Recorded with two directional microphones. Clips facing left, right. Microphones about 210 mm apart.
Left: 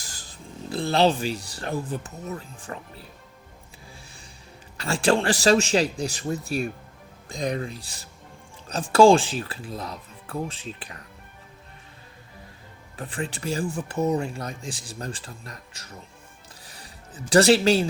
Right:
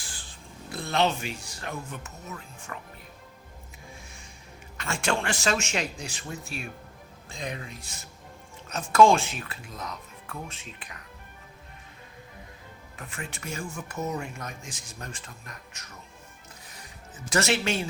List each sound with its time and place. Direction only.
0.0 s speech: 40° left (ahead or behind)
3.9 s music: 35° left (ahead or behind)
4.8 s speech: 35° left (ahead or behind)
13.0 s speech: 30° left (ahead or behind)
16.6 s music: 35° left (ahead or behind)